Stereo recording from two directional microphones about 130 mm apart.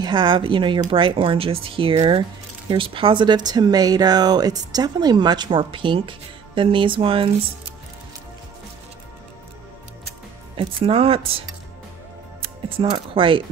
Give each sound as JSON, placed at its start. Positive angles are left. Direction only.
{"t": 0.0, "sound": "speech", "side_deg": -35}
{"t": 10.5, "sound": "speech", "side_deg": -45}